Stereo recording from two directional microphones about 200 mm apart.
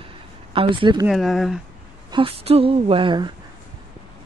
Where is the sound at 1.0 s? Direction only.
Centre (ahead or behind).